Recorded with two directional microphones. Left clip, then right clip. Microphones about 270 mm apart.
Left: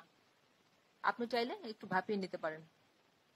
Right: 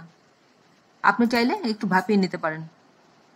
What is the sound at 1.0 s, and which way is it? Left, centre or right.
A woman's voice, centre.